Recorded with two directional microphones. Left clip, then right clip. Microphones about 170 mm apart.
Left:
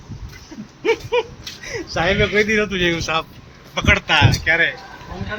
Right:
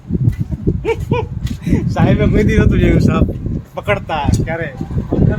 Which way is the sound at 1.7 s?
70° right (ahead or behind).